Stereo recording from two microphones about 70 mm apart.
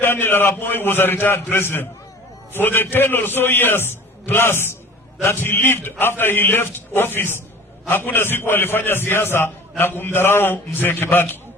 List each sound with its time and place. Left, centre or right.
0.0 s a man's voice: left